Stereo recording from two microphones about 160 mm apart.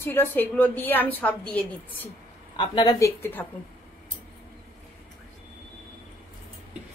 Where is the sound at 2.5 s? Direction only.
30° left (ahead or behind).